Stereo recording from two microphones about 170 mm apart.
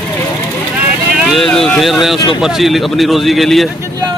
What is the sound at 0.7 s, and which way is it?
Vehicle, 5° right (ahead or behind).